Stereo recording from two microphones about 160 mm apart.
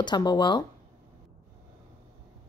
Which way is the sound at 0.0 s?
25° left (ahead or behind).